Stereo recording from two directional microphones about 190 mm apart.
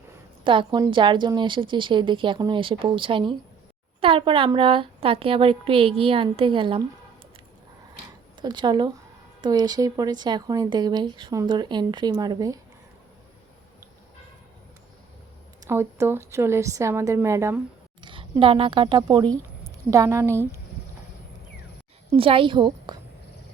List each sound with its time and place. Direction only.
0.4 s speech: 25° right (ahead or behind)
8.4 s speech: 25° right (ahead or behind)
15.6 s a woman's voice: 15° right (ahead or behind)
18.0 s speech: 25° right (ahead or behind)
22.1 s speech: 30° right (ahead or behind)